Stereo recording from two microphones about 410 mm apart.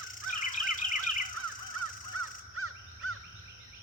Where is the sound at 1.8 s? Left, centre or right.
Right.